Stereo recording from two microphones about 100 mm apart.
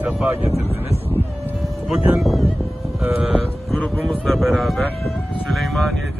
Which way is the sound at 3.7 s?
5° left (ahead or behind).